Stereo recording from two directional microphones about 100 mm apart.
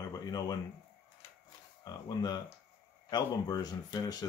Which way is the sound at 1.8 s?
45° left (ahead or behind).